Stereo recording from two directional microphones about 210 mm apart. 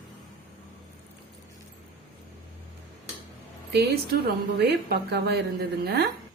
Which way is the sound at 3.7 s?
50° right (ahead or behind).